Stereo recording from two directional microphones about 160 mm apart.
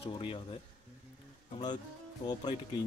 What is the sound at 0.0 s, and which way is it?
Speech, 35° left (ahead or behind).